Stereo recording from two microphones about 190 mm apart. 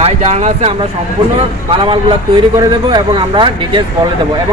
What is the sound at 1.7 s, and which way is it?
Speech, 30° right (ahead or behind).